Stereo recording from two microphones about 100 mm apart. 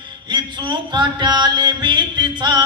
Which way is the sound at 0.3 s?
50° right (ahead or behind).